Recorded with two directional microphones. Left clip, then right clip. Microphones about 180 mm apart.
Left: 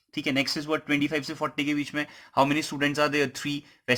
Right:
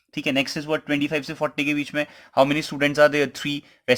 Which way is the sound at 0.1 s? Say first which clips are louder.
Right 3 dB; 30° right (ahead or behind).